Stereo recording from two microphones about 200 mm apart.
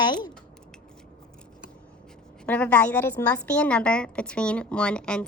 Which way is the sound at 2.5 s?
5° left (ahead or behind).